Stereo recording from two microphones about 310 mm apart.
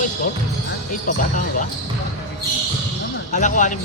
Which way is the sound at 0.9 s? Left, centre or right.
Left.